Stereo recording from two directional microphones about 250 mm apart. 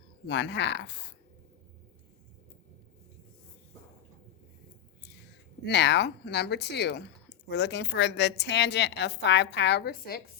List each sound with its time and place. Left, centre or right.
0.3 s speech: left
5.6 s speech: left